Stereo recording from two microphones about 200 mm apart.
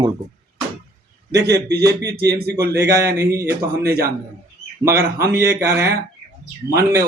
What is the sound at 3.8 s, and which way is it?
Speech, 50° right (ahead or behind).